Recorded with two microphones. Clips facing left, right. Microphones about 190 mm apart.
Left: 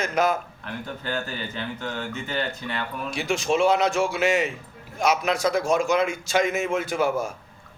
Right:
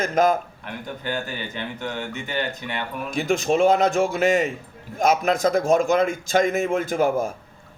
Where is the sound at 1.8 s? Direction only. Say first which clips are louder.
Right 1 dB; 15° right (ahead or behind).